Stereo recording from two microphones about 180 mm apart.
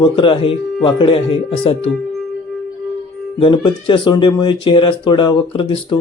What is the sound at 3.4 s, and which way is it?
Speech, 25° left (ahead or behind).